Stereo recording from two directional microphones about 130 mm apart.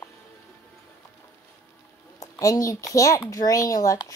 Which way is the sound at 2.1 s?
25° left (ahead or behind).